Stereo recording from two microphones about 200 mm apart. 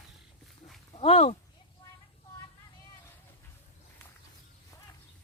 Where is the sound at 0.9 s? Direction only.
30° left (ahead or behind).